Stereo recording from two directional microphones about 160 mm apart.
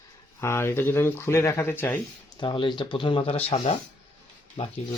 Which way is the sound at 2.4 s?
30° left (ahead or behind).